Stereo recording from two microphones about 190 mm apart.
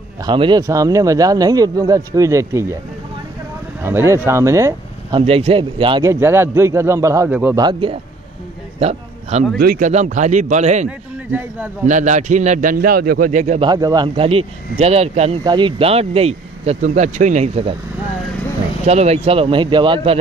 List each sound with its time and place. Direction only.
0.2 s speech: 25° right (ahead or behind)
3.8 s speech: 15° right (ahead or behind)
5.2 s speech: 30° right (ahead or behind)
6.0 s a man's voice: 15° right (ahead or behind)
7.5 s speech: 25° right (ahead or behind)
8.7 s a sound: 30° right (ahead or behind)
9.6 s speech: 50° right (ahead or behind)
10.9 s a man's voice: 10° right (ahead or behind)
11.8 s speech: 40° right (ahead or behind)
13.7 s speech: 20° right (ahead or behind)
18.9 s speech: 35° right (ahead or behind)